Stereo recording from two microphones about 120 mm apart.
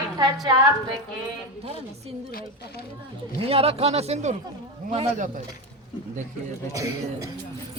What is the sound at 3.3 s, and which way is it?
Speech, 55° right (ahead or behind).